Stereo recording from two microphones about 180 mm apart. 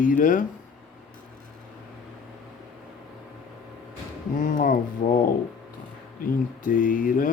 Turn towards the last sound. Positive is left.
turn(degrees=50)  # may be behind; listen again after turning